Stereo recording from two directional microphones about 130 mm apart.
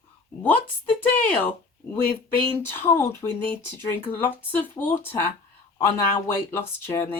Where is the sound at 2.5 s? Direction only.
20° left (ahead or behind).